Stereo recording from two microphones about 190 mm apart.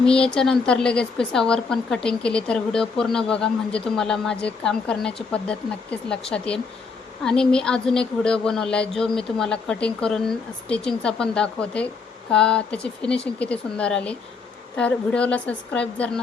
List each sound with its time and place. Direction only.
0.0 s speech: 5° left (ahead or behind)